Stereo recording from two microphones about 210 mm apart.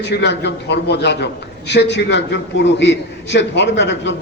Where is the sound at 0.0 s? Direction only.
55° left (ahead or behind).